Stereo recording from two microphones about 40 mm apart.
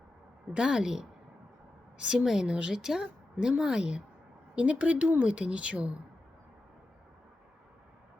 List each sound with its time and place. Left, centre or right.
0.5 s speech: right
2.2 s speech: centre
2.5 s speech: right